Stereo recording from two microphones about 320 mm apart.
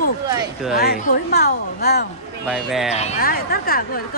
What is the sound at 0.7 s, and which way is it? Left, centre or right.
Speech, left.